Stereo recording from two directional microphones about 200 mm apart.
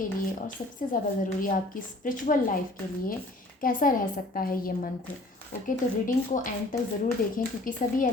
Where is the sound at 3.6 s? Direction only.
40° left (ahead or behind).